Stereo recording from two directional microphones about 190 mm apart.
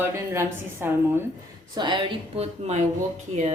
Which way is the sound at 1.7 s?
25° right (ahead or behind).